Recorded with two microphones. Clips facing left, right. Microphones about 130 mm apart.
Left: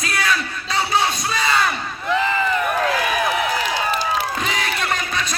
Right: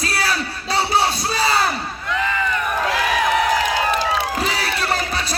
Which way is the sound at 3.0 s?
90° right.